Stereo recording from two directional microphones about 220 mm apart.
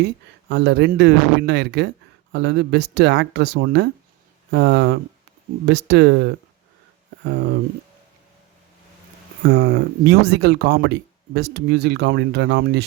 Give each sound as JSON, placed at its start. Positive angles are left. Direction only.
{"t": 0.0, "sound": "speech", "side_deg": -50}
{"t": 9.5, "sound": "speech", "side_deg": -55}